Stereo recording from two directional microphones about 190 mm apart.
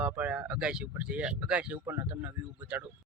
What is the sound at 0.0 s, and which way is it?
Speech, 5° right (ahead or behind).